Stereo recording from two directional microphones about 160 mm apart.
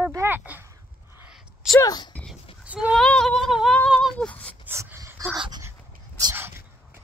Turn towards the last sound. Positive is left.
turn(degrees=-15)  # may be behind; listen again after turning